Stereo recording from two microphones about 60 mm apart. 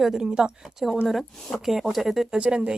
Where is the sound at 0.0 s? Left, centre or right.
Centre.